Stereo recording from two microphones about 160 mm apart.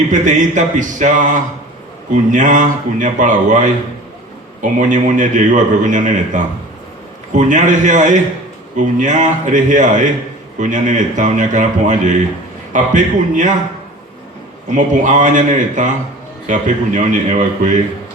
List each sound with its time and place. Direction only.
0.1 s a man's voice: 50° right (ahead or behind)
14.8 s a man's voice: 50° right (ahead or behind)